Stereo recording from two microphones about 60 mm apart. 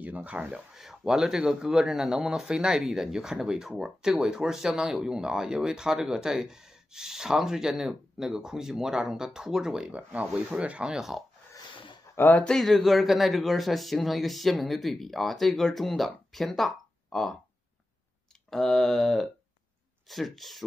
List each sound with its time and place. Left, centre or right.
0.0 s speech: right
0.7 s speech: centre
10.6 s speech: centre
12.2 s speech: left
12.4 s speech: centre
18.5 s speech: centre